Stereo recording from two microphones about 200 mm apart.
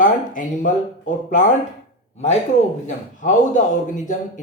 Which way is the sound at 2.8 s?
40° left (ahead or behind).